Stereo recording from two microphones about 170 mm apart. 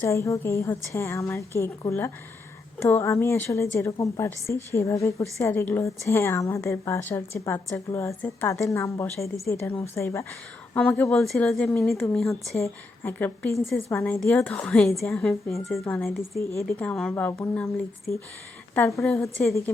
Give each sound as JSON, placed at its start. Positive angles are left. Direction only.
{"t": 0.0, "sound": "a woman's voice", "side_deg": 15}
{"t": 16.4, "sound": "a woman's voice", "side_deg": 15}